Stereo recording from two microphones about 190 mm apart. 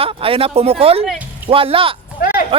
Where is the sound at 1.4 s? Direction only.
30° right (ahead or behind).